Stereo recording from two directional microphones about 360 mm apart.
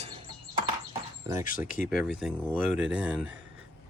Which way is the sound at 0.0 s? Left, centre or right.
Centre.